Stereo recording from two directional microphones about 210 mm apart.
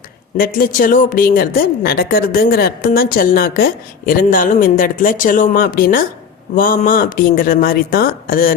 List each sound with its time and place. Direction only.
0.3 s a woman's voice: 45° left (ahead or behind)